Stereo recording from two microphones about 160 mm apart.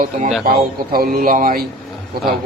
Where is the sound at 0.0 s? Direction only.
55° right (ahead or behind).